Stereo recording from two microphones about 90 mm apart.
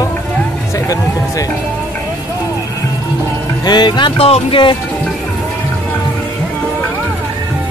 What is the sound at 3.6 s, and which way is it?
Music, 55° left (ahead or behind).